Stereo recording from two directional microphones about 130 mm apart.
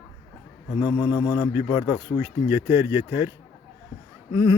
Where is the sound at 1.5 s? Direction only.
15° right (ahead or behind).